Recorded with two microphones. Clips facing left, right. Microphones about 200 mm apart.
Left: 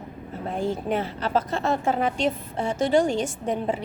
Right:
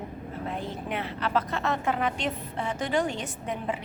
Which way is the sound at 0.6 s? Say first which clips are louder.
Left 11 dB; 30° left (ahead or behind).